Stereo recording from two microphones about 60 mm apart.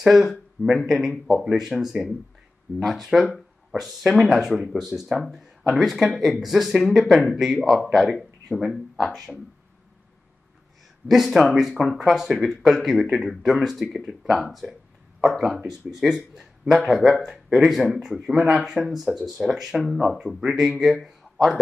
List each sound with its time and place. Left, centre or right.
0.0 s speech: centre
11.1 s speech: centre